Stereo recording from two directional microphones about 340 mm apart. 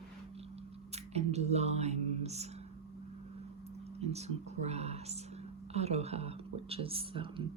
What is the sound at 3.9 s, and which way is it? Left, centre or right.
Speech, centre.